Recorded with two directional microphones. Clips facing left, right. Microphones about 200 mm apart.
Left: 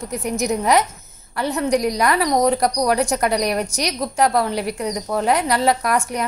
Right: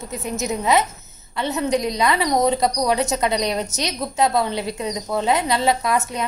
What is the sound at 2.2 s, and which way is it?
Speech, 25° right (ahead or behind).